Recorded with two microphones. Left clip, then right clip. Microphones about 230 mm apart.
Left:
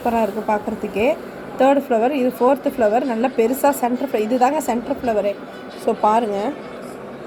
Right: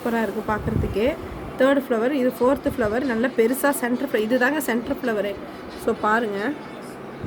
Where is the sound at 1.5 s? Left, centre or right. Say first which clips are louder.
Left 4 dB; centre.